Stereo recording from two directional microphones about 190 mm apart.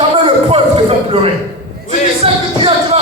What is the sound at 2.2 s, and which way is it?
Music, 30° right (ahead or behind).